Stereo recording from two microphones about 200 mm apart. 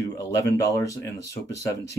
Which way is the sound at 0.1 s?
15° left (ahead or behind).